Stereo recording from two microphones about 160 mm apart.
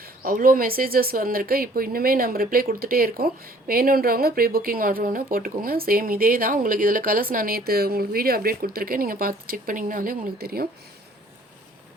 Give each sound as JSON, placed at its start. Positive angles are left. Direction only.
{"t": 0.0, "sound": "speech", "side_deg": -65}